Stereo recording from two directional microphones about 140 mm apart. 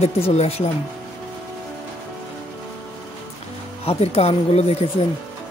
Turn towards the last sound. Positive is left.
turn(degrees=50)  # may be behind; listen again after turning